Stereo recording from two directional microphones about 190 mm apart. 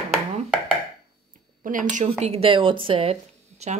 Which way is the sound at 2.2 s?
30° right (ahead or behind).